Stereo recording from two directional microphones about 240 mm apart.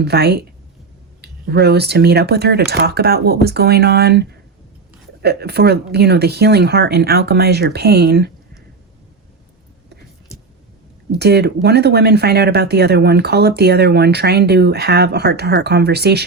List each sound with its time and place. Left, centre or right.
0.0 s speech: right
11.1 s speech: right